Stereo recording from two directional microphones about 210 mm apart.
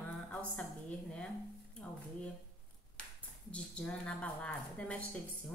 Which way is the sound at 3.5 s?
5° left (ahead or behind).